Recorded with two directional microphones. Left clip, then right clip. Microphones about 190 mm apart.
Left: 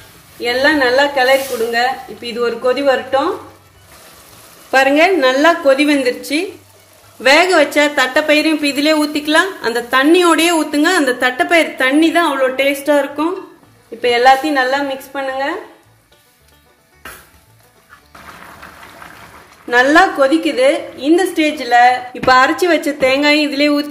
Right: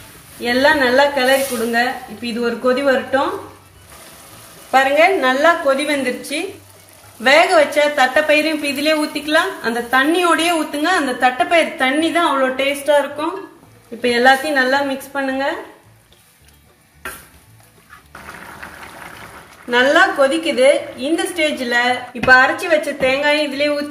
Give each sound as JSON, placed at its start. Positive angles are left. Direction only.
{"t": 0.4, "sound": "speech", "side_deg": 40}
{"t": 4.6, "sound": "a woman's voice", "side_deg": 55}
{"t": 14.0, "sound": "speech", "side_deg": 40}
{"t": 19.7, "sound": "a woman's voice", "side_deg": 50}